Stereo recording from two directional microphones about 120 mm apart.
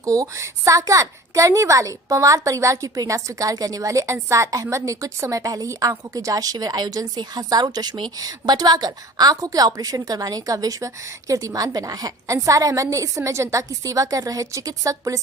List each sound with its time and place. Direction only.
0.0 s a woman's voice: 30° right (ahead or behind)